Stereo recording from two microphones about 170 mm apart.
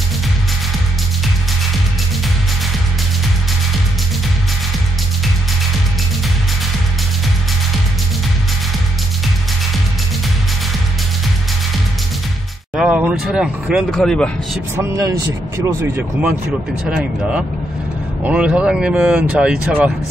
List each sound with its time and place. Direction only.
12.7 s speech: 5° right (ahead or behind)
14.8 s speech: 15° right (ahead or behind)